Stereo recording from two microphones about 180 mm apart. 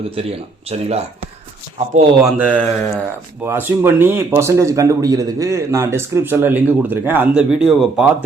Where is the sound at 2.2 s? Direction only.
5° right (ahead or behind).